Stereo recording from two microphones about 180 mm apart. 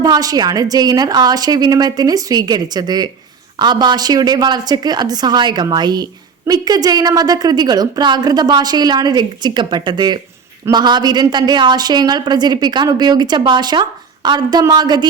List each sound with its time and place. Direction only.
0.0 s a woman's voice: 20° right (ahead or behind)